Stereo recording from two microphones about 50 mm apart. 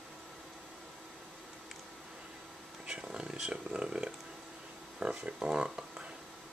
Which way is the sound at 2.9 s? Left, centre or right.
Centre.